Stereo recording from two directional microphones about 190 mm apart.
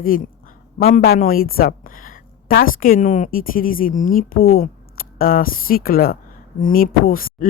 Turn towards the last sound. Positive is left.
turn(degrees=50)  # may be behind; listen again after turning